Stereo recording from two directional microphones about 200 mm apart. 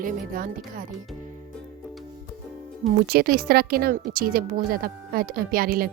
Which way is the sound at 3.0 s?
50° right (ahead or behind).